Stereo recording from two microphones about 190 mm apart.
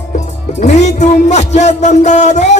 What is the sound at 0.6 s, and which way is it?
Music, 35° left (ahead or behind).